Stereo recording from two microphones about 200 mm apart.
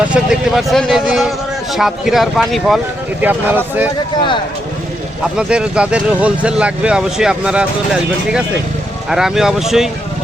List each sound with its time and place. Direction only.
0.0 s speech: 5° right (ahead or behind)
5.2 s speech: 5° right (ahead or behind)
9.0 s speech: centre (ahead or behind)